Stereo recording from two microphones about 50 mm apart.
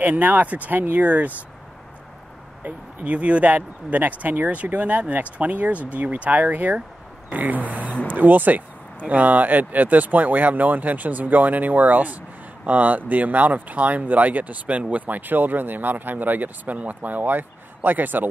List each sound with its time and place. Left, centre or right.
0.0 s speech: right
2.6 s speech: right